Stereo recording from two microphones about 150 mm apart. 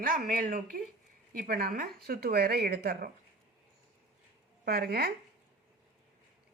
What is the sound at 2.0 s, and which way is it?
Speech, 90° right.